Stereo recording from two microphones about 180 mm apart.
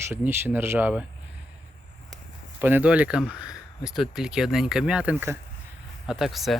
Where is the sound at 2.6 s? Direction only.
10° right (ahead or behind).